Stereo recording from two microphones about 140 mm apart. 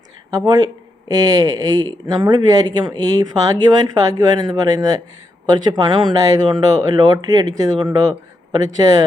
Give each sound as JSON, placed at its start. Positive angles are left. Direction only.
{"t": 0.3, "sound": "speech", "side_deg": -25}